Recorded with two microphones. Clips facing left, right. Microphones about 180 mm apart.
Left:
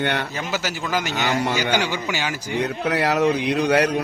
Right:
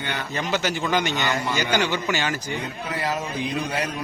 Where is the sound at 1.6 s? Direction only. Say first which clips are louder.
Left 1 dB; 10° left (ahead or behind).